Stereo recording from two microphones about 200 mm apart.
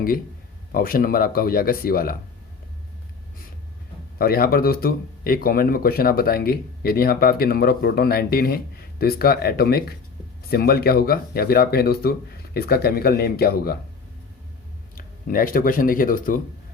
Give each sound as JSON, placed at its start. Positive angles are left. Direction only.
{"t": 0.7, "sound": "speech", "side_deg": 45}
{"t": 4.2, "sound": "speech", "side_deg": 50}
{"t": 14.9, "sound": "speech", "side_deg": 45}